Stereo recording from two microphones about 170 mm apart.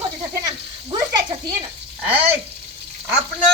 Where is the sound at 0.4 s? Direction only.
25° right (ahead or behind).